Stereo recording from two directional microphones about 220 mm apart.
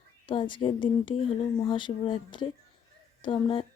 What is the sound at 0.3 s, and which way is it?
Speech, 20° left (ahead or behind).